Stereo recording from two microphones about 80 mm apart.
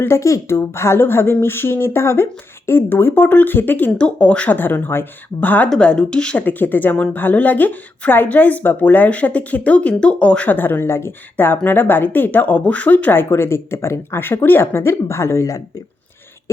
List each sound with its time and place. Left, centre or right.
0.0 s a woman's voice: left
5.7 s speech: centre
6.4 s a woman's voice: left